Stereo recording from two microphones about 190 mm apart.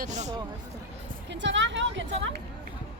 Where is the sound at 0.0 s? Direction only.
40° right (ahead or behind).